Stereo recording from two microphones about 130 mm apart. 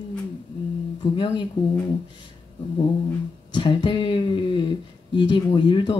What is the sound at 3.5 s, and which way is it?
Speech, 35° left (ahead or behind).